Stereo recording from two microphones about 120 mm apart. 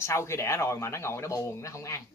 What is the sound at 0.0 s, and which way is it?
Speech, 25° left (ahead or behind).